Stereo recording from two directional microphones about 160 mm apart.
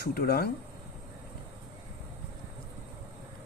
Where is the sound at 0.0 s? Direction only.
75° left (ahead or behind).